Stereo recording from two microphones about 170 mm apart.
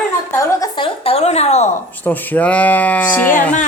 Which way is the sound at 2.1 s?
10° left (ahead or behind).